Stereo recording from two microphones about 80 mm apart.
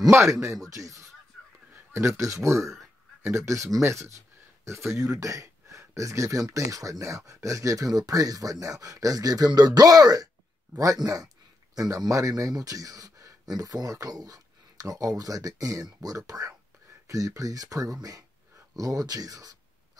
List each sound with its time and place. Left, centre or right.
0.1 s speech: right